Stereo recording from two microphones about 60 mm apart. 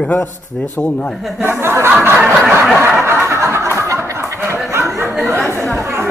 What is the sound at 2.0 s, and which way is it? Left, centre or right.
Snicker, right.